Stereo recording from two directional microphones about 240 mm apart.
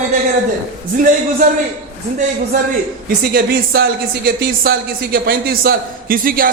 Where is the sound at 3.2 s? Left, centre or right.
Right.